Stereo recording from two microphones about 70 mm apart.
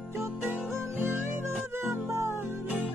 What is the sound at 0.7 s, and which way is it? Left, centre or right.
Music, right.